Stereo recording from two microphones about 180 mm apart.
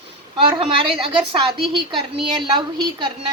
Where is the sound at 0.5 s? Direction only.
30° right (ahead or behind).